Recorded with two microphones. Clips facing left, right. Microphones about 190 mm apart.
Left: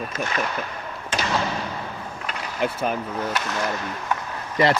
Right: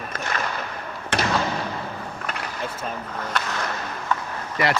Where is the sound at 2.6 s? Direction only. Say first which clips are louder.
Left 9 dB; 75° left (ahead or behind).